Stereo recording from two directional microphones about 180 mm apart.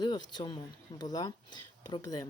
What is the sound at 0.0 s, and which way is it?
A woman's voice, 25° left (ahead or behind).